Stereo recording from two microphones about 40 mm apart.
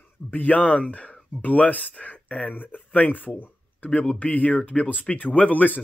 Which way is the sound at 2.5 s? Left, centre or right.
Left.